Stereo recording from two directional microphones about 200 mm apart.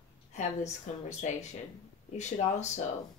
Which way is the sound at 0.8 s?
35° left (ahead or behind).